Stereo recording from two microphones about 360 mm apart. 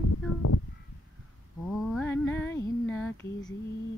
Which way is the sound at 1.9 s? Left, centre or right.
Centre.